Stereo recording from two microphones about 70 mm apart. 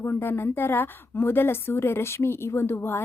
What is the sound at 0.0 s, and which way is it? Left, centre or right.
A woman's voice, left.